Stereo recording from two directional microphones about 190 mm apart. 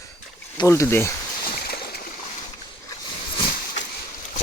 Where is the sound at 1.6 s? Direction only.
55° left (ahead or behind).